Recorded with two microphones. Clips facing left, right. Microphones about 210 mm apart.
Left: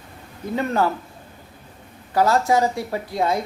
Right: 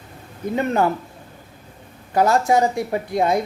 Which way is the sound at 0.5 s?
20° right (ahead or behind).